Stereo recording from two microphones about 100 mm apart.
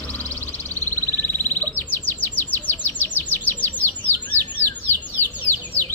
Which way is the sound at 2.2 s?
20° left (ahead or behind).